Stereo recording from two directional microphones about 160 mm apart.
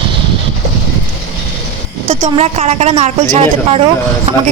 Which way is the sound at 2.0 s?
40° right (ahead or behind).